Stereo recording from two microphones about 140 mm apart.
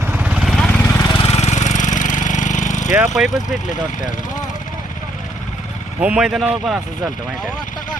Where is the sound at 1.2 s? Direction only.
50° left (ahead or behind).